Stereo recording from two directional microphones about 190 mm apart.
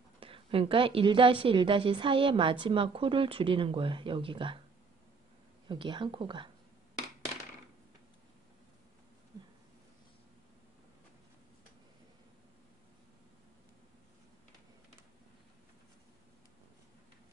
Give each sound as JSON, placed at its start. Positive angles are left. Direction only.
{"t": 0.2, "sound": "a woman's voice", "side_deg": -30}
{"t": 5.7, "sound": "a woman's voice", "side_deg": -25}